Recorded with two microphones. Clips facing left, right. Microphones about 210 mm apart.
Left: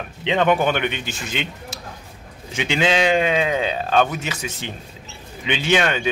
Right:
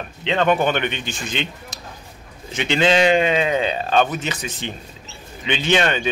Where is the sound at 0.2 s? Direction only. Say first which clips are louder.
Even; 15° left (ahead or behind).